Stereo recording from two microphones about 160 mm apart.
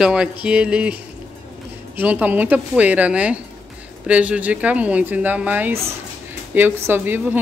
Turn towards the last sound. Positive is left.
turn(degrees=-10)  # may be behind; listen again after turning